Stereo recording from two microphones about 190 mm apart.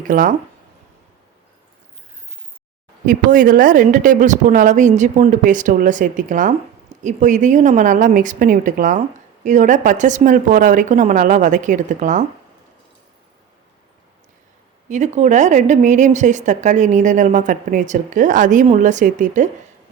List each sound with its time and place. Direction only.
0.1 s a woman's voice: 45° right (ahead or behind)
3.1 s a woman's voice: 45° right (ahead or behind)
14.8 s a woman's voice: 40° right (ahead or behind)